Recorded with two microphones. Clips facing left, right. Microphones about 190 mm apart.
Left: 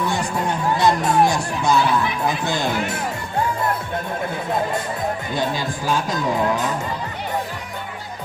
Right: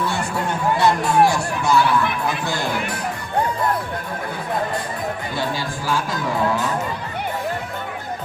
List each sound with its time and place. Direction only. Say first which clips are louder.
0.8 s speech: right 1 dB; 20° left (ahead or behind)
2.4 s music: left 2 dB; 20° left (ahead or behind)
5.4 s speech: left 1 dB; 20° left (ahead or behind)